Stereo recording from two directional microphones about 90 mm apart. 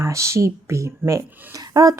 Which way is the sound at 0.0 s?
35° right (ahead or behind).